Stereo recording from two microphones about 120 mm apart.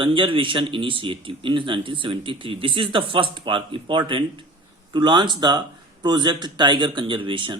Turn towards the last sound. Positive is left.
turn(degrees=-45)  # may be behind; listen again after turning